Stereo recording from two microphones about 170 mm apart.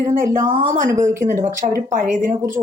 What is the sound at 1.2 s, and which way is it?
A woman's voice, 50° right (ahead or behind).